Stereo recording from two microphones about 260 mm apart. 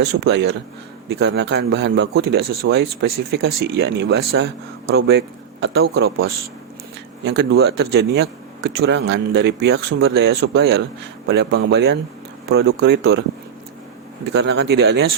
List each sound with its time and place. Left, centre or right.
0.2 s speech: right
14.3 s speech: right